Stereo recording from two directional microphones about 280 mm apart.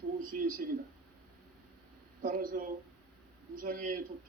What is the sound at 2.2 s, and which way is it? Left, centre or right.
A man's voice, right.